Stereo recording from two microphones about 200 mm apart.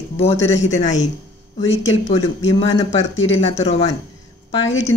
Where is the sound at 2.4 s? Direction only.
70° left (ahead or behind).